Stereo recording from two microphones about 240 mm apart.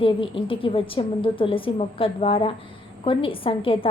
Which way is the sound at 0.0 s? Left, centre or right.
Left.